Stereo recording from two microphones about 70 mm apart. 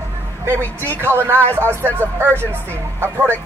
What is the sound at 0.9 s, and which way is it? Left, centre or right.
Speech, right.